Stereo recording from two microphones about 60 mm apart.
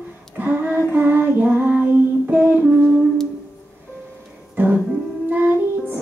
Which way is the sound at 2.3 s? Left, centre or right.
Right.